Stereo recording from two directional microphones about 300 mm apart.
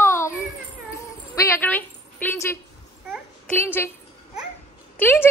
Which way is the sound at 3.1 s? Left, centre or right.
Centre.